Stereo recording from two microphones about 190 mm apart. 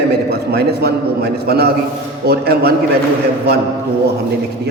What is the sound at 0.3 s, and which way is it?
A man's voice, 60° right (ahead or behind).